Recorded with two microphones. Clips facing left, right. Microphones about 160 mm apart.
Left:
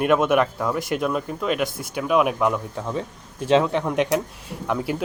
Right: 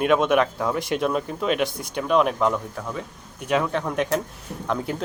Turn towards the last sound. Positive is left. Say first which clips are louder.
# left 2 dB
turn(degrees=10)  # may be behind; listen again after turning